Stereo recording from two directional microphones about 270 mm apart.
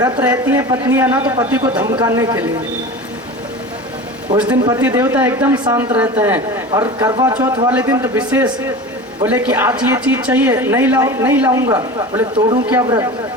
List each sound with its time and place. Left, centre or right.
0.0 s a woman's voice: centre
4.3 s a woman's voice: centre